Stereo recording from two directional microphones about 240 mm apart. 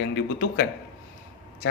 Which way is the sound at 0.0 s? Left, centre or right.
Left.